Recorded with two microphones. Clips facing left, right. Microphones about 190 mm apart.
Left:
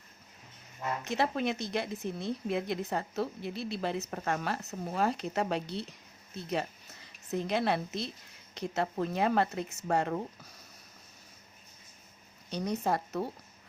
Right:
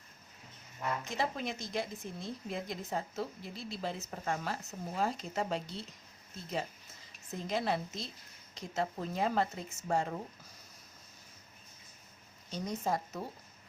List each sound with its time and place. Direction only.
1.0 s speech: 65° left (ahead or behind)
12.5 s speech: 65° left (ahead or behind)